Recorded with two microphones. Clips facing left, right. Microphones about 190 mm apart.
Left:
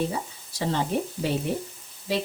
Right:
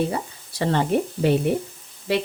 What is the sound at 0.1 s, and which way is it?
Speech, 65° right (ahead or behind).